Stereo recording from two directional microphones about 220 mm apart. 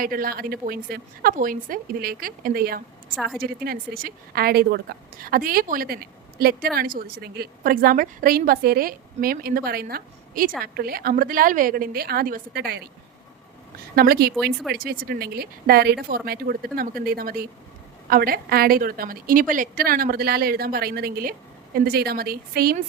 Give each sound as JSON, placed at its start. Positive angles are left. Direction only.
{"t": 0.0, "sound": "a woman's voice", "side_deg": -40}
{"t": 13.9, "sound": "a woman's voice", "side_deg": -45}